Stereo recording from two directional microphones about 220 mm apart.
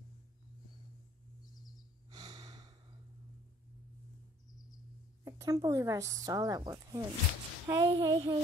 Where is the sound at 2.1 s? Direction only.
15° right (ahead or behind).